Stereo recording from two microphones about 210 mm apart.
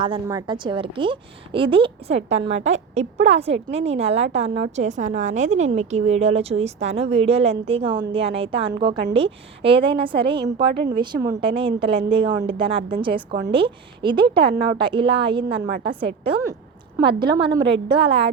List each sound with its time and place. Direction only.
0.3 s a woman's voice: 20° right (ahead or behind)